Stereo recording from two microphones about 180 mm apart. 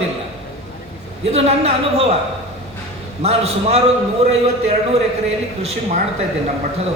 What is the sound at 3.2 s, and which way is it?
Speech, 35° right (ahead or behind).